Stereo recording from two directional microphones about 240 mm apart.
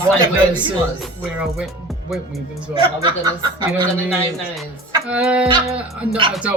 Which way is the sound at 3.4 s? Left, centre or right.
Centre.